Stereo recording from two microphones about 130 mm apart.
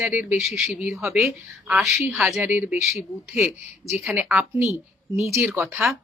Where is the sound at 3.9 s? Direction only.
5° right (ahead or behind).